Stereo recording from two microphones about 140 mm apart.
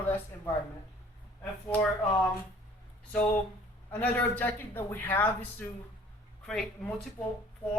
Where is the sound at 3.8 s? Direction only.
15° left (ahead or behind).